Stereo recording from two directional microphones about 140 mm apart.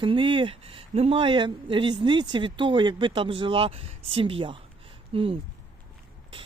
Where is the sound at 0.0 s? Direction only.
35° right (ahead or behind).